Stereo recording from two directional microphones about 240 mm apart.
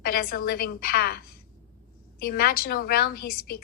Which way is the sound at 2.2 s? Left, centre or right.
Left.